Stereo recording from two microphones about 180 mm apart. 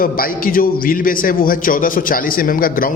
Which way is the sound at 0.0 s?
50° left (ahead or behind).